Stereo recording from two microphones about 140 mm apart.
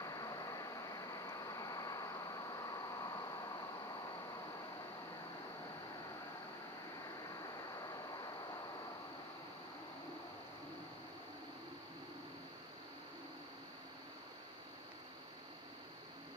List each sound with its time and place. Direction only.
0.0 s vehicle: 25° left (ahead or behind)